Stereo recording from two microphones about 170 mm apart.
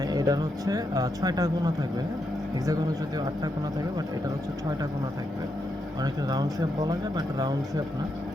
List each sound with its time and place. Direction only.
0.1 s speech: 20° right (ahead or behind)
6.0 s speech: 25° right (ahead or behind)